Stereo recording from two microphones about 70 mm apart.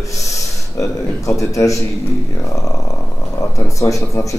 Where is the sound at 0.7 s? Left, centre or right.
Left.